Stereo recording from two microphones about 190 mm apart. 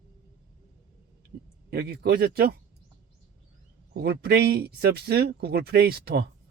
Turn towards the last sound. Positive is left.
turn(degrees=-55)  # may be behind; listen again after turning